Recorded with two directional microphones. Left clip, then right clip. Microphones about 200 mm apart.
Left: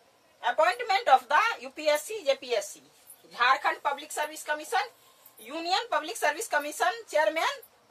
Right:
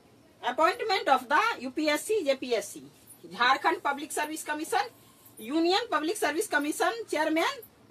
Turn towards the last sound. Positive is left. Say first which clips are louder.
# left 1 dB
turn(degrees=25)  # may be behind; listen again after turning